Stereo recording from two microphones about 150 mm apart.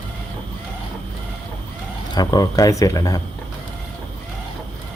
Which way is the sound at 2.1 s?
25° left (ahead or behind).